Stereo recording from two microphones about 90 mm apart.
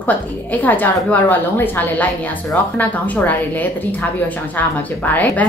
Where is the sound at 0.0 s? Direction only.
20° left (ahead or behind).